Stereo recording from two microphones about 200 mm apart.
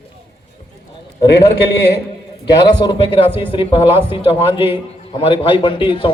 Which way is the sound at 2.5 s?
20° left (ahead or behind).